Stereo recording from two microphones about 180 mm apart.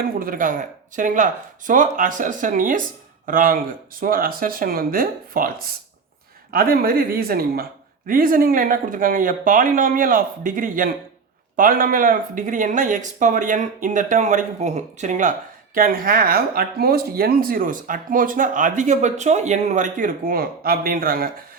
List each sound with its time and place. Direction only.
0.2 s speech: 50° right (ahead or behind)
6.5 s speech: 55° right (ahead or behind)